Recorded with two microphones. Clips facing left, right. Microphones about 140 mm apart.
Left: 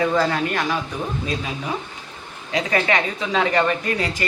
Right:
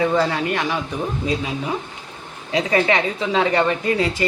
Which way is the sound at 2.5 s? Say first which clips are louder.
Right 3 dB; 25° right (ahead or behind).